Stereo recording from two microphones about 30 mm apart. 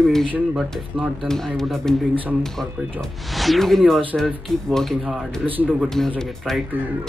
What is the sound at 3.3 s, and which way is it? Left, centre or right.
Speech, centre.